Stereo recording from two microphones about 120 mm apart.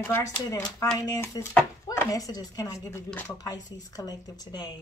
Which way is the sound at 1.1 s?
25° left (ahead or behind).